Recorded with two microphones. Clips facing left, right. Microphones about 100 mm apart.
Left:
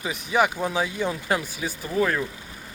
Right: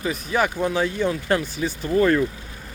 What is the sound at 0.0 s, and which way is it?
Speech, 15° left (ahead or behind).